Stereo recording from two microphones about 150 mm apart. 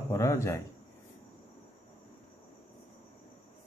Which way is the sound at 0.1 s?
20° left (ahead or behind).